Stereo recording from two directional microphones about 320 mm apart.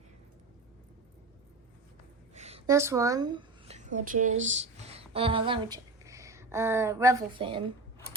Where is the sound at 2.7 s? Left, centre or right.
Centre.